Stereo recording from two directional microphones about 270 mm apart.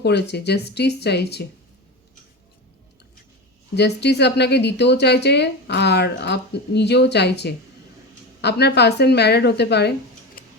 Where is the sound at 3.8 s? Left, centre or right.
Left.